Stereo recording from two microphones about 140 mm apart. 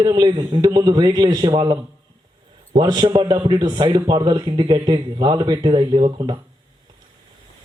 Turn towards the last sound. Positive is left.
turn(degrees=-35)  # may be behind; listen again after turning